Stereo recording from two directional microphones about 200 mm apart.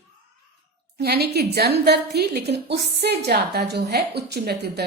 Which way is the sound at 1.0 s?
55° right (ahead or behind).